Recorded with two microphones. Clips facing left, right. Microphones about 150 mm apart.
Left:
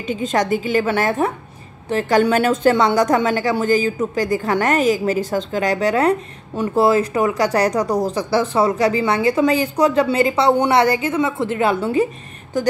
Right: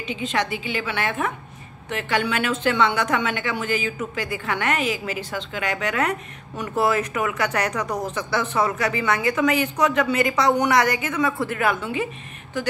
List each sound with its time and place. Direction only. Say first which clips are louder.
0.0 s a woman's voice: left 6 dB; 45° left (ahead or behind)